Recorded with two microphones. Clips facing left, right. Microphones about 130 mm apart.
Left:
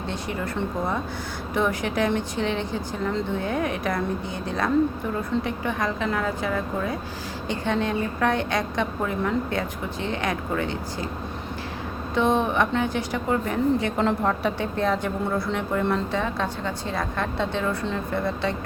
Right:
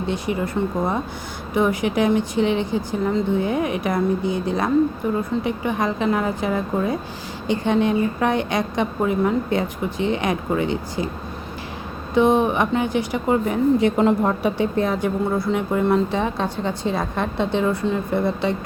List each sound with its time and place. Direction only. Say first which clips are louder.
0.0 s a woman's voice: right 6 dB; 10° right (ahead or behind)
12.1 s a woman's voice: right 5 dB; 15° right (ahead or behind)